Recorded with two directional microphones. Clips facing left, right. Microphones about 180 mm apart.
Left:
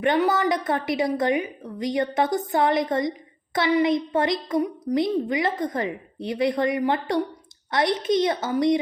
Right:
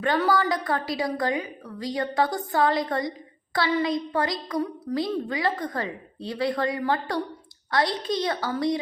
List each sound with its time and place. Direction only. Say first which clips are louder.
0.0 s a woman's voice: left 2 dB; 20° left (ahead or behind)